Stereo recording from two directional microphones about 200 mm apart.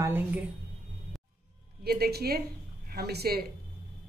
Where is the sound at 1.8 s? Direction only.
50° right (ahead or behind).